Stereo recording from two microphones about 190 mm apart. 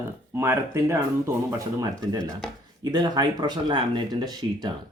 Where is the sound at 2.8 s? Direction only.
20° right (ahead or behind).